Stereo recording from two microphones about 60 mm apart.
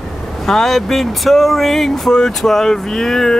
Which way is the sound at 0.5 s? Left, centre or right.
Centre.